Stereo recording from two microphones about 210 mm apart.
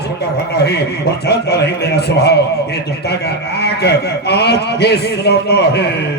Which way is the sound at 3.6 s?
55° left (ahead or behind).